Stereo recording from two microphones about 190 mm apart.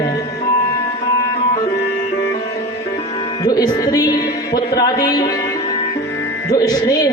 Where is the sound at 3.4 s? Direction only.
20° left (ahead or behind).